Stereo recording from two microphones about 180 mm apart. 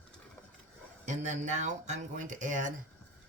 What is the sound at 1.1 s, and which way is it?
Speech, 40° right (ahead or behind).